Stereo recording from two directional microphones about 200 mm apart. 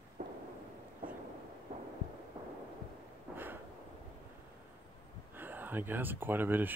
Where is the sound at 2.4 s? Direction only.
20° right (ahead or behind).